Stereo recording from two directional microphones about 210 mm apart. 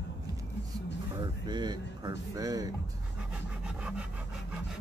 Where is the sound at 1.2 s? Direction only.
20° right (ahead or behind).